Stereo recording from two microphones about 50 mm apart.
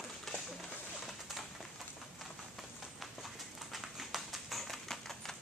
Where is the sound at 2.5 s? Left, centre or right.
Centre.